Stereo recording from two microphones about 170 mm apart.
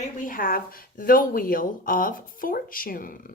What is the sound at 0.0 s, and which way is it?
Speech, 55° left (ahead or behind).